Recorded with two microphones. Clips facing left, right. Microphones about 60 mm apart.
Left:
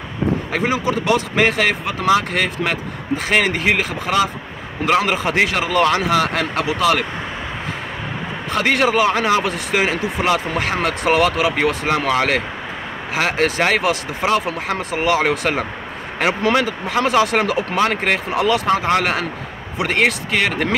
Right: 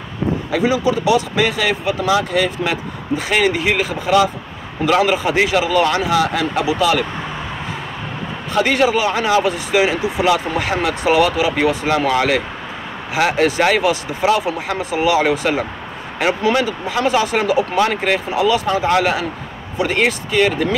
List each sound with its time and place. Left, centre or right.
0.5 s speech: left
8.5 s speech: left
11.9 s speech: left
17.7 s speech: left
19.8 s speech: left